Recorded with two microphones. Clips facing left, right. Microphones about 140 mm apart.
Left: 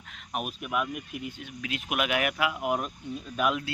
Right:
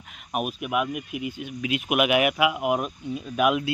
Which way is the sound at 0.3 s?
10° right (ahead or behind).